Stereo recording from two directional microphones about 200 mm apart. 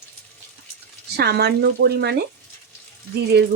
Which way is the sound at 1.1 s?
55° right (ahead or behind).